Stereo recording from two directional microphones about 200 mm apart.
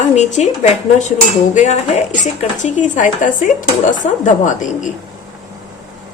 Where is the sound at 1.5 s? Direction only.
35° left (ahead or behind).